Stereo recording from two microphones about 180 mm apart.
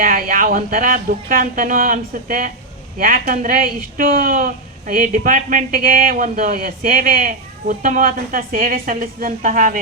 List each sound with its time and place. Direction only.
0.0 s speech: 50° right (ahead or behind)